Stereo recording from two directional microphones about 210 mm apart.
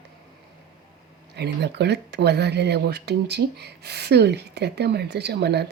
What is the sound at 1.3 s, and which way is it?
Speech, 50° right (ahead or behind).